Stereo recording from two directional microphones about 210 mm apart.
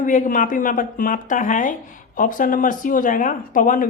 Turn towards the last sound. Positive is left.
turn(degrees=40)  # may be behind; listen again after turning